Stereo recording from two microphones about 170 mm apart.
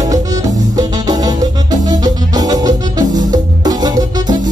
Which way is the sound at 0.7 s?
20° right (ahead or behind).